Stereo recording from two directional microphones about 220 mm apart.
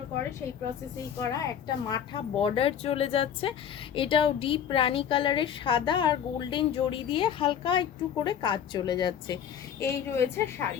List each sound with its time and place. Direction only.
1.2 s a woman's voice: 15° left (ahead or behind)